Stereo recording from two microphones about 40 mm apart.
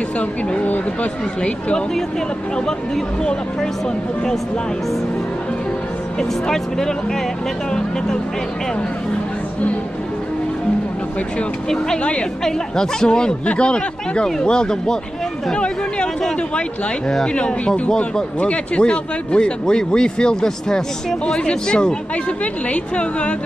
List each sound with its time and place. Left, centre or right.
0.2 s a woman's voice: left
6.1 s a man's voice: centre
12.0 s speech: left
12.4 s speech: centre
17.3 s a man's voice: left
21.5 s a woman's voice: left